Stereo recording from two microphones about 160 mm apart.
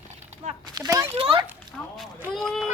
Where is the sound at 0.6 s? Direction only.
25° right (ahead or behind).